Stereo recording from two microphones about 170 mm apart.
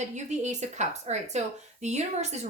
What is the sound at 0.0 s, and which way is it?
A woman's voice, 45° right (ahead or behind).